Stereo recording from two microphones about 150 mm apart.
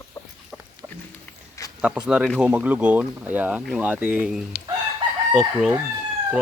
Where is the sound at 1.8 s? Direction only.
5° right (ahead or behind).